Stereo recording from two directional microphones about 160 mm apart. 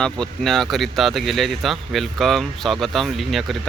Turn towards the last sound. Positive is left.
turn(degrees=0)  # may be behind; listen again after turning